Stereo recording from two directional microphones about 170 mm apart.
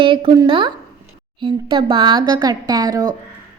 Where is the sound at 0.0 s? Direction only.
30° right (ahead or behind).